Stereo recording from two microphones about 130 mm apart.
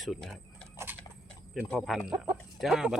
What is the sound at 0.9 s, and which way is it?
Horse, 15° right (ahead or behind).